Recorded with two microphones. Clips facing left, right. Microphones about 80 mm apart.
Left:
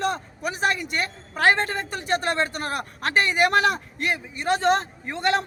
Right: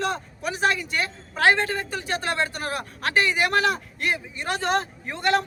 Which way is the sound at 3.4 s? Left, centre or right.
Left.